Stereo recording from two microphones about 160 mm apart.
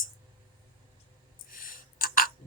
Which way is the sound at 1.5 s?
60° left (ahead or behind).